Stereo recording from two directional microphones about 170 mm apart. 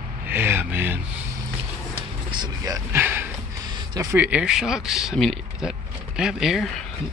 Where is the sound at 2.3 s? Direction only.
25° right (ahead or behind).